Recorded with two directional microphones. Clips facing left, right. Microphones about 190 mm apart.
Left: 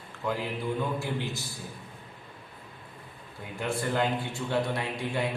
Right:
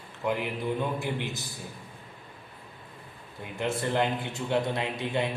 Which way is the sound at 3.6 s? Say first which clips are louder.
Right 1 dB; 20° right (ahead or behind).